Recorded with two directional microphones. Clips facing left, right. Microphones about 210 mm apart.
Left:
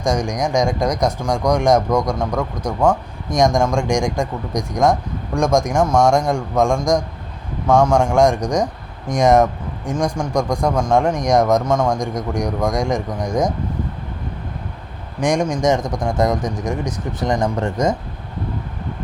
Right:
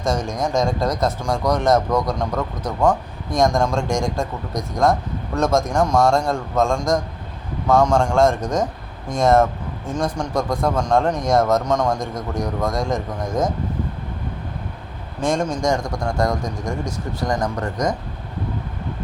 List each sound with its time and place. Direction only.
0.0 s speech: 15° left (ahead or behind)
7.7 s speech: centre (ahead or behind)
7.9 s speech: 15° left (ahead or behind)
12.1 s speech: 15° left (ahead or behind)
13.1 s speech: centre (ahead or behind)
15.2 s speech: 15° left (ahead or behind)